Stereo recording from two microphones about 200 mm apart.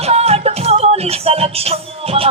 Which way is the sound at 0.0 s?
30° right (ahead or behind).